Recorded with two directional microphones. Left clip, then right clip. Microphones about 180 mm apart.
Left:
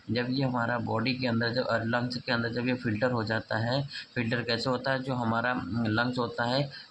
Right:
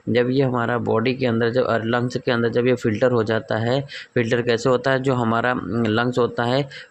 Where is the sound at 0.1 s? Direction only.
50° right (ahead or behind).